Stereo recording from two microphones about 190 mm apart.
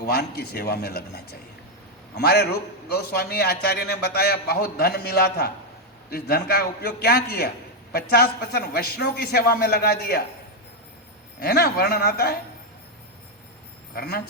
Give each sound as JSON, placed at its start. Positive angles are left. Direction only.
{"t": 0.0, "sound": "a man's voice", "side_deg": 55}
{"t": 11.3, "sound": "a man's voice", "side_deg": 55}
{"t": 13.9, "sound": "speech", "side_deg": 55}